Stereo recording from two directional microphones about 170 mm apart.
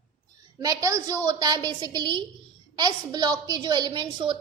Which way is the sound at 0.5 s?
20° right (ahead or behind).